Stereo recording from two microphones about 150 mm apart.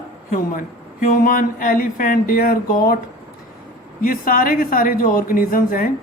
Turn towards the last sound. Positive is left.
turn(degrees=70)  # may be behind; listen again after turning